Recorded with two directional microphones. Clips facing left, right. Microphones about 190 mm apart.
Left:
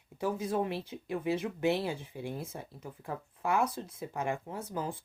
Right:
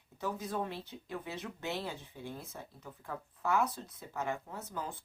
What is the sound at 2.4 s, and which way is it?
Speech, 30° left (ahead or behind).